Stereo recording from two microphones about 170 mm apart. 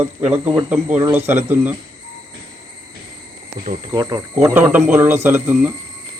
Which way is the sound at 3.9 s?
25° right (ahead or behind).